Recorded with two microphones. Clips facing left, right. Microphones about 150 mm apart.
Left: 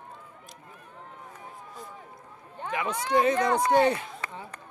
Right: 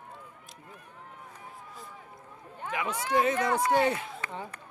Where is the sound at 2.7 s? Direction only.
10° right (ahead or behind).